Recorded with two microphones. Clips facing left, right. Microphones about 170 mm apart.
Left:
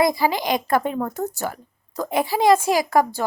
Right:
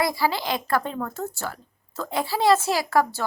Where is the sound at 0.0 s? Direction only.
20° left (ahead or behind).